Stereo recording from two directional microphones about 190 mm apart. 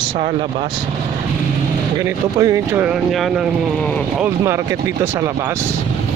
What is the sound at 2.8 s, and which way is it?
Speech, centre (ahead or behind).